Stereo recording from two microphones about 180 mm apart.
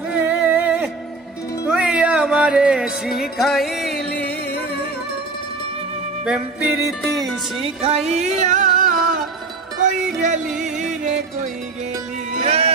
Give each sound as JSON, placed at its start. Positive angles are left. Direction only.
{"t": 0.1, "sound": "a sound", "side_deg": -5}
{"t": 1.7, "sound": "music", "side_deg": -5}
{"t": 6.2, "sound": "music", "side_deg": -5}
{"t": 7.6, "sound": "music", "side_deg": -35}
{"t": 10.6, "sound": "music", "side_deg": -40}
{"t": 12.4, "sound": "music", "side_deg": -35}